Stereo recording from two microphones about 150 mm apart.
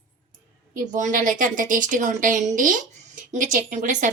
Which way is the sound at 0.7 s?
55° right (ahead or behind).